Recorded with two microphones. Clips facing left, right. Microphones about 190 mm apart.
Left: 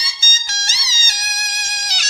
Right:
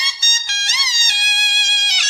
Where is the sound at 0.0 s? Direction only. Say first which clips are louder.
Even; 40° left (ahead or behind).